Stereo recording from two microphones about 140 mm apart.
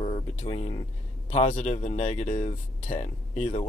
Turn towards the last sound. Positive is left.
turn(degrees=50)  # may be behind; listen again after turning